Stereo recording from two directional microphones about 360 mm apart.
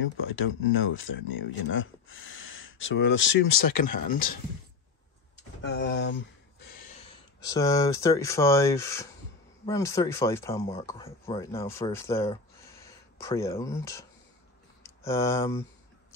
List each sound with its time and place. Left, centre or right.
0.0 s speech: left
5.6 s speech: left
6.6 s a sound: left
7.6 s speech: centre